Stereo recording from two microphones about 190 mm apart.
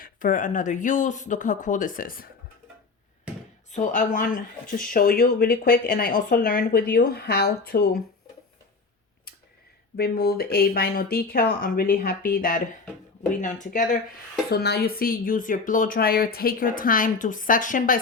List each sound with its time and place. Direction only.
0.0 s speech: 45° left (ahead or behind)
3.7 s speech: 40° left (ahead or behind)
10.0 s speech: 55° left (ahead or behind)
14.5 s speech: 60° left (ahead or behind)